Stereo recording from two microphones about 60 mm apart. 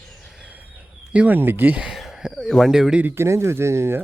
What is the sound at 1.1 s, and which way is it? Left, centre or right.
Speech, centre.